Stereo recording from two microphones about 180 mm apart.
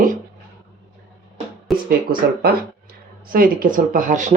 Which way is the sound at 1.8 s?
55° right (ahead or behind).